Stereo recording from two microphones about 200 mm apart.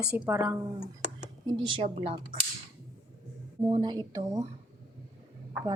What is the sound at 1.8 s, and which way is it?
Speech, 40° right (ahead or behind).